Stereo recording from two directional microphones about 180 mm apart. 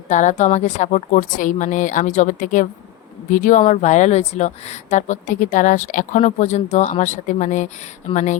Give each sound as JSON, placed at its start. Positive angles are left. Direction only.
{"t": 0.1, "sound": "a woman's voice", "side_deg": 40}